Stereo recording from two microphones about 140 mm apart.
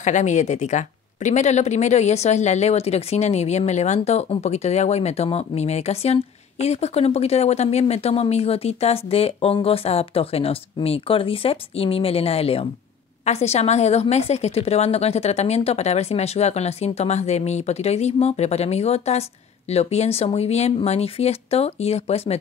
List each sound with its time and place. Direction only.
0.0 s speech: 60° left (ahead or behind)